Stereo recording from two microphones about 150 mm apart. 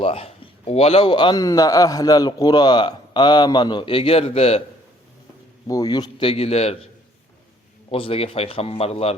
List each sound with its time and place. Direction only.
0.0 s a man's voice: 40° left (ahead or behind)
5.6 s a man's voice: 25° left (ahead or behind); by 6.7 s 45° left (ahead or behind)
7.9 s a man's voice: 40° left (ahead or behind)